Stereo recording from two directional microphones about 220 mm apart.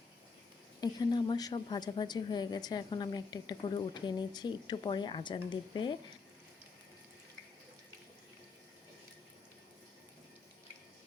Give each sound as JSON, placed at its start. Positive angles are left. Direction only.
{"t": 0.8, "sound": "a woman's voice", "side_deg": 20}